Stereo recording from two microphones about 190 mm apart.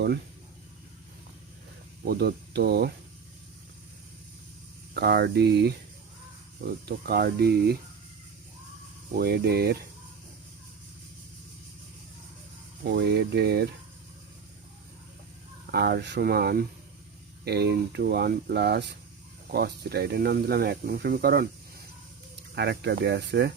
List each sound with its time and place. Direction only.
2.0 s speech: 60° right (ahead or behind)
4.9 s speech: 60° right (ahead or behind)
9.1 s speech: 55° right (ahead or behind)
12.8 s speech: 60° right (ahead or behind)
15.7 s speech: 60° right (ahead or behind)
22.5 s speech: 60° right (ahead or behind)